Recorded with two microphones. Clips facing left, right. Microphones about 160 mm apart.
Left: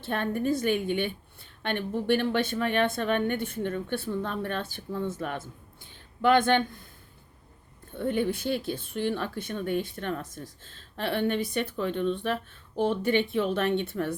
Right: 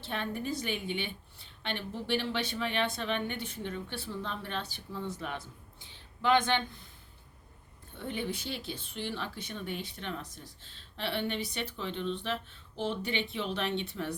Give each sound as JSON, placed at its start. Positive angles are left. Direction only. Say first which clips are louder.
{"t": 0.0, "sound": "a woman's voice", "louder": "left 7 dB", "side_deg": 50}
{"t": 7.9, "sound": "a woman's voice", "louder": "left 9 dB", "side_deg": 50}